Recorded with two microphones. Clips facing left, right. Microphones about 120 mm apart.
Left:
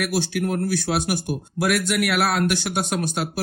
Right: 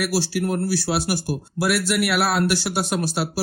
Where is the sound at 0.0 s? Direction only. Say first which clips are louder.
Right 1 dB; centre (ahead or behind).